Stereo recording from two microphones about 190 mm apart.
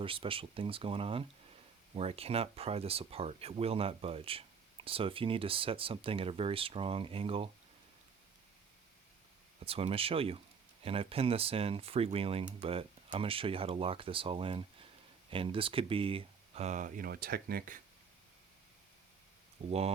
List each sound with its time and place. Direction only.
0.0 s speech: 30° right (ahead or behind)
9.6 s speech: 30° right (ahead or behind); by 17.7 s 50° right (ahead or behind)